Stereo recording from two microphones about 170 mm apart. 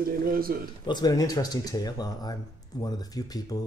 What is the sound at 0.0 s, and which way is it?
Speech, 60° right (ahead or behind).